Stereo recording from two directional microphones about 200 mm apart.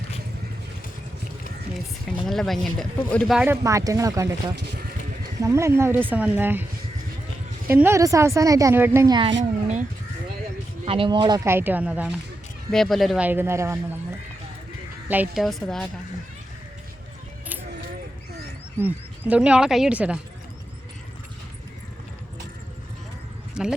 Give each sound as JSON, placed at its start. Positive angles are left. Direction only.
{"t": 2.2, "sound": "speech", "side_deg": 0}
{"t": 7.7, "sound": "speech", "side_deg": -10}
{"t": 9.4, "sound": "speech", "side_deg": -35}
{"t": 10.8, "sound": "speech", "side_deg": -25}
{"t": 18.8, "sound": "speech", "side_deg": -10}
{"t": 23.6, "sound": "speech", "side_deg": 0}